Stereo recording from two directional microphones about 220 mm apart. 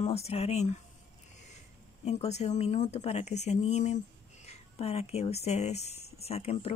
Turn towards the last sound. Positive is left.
turn(degrees=30)  # may be behind; listen again after turning